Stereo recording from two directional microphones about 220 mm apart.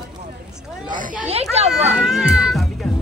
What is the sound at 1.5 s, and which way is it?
Speech, 30° right (ahead or behind).